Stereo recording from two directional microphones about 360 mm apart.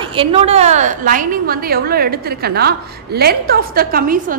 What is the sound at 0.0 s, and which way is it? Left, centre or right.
A woman's voice, centre.